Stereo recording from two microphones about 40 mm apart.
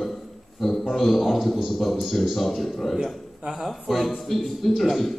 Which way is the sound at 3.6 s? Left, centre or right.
Centre.